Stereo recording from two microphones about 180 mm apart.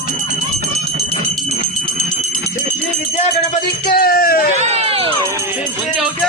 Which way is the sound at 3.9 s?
55° left (ahead or behind).